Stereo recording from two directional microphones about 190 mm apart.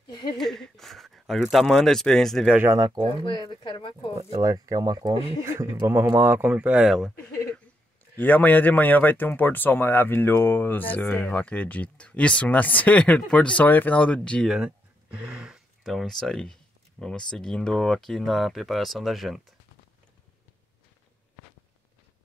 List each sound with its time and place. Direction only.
0.4 s speech: centre (ahead or behind)
2.6 s speech: 20° right (ahead or behind)
3.3 s speech: 25° left (ahead or behind)
4.3 s speech: 20° right (ahead or behind); by 19.4 s centre (ahead or behind)